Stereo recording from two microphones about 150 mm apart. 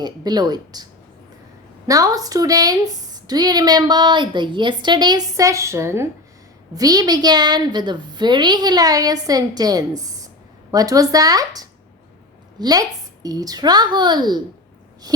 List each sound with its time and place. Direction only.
0.0 s a woman's voice: 25° right (ahead or behind)
1.9 s a woman's voice: 25° right (ahead or behind)